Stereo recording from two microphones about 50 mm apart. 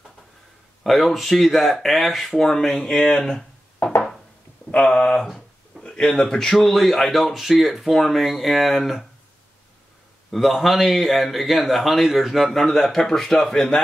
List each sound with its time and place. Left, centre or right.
0.8 s a man's voice: centre
4.6 s a man's voice: left; by 9.0 s centre
10.3 s a man's voice: centre